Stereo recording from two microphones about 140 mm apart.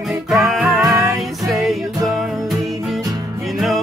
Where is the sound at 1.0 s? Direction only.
25° right (ahead or behind).